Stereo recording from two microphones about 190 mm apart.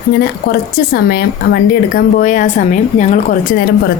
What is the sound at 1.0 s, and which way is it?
Speech, 55° left (ahead or behind).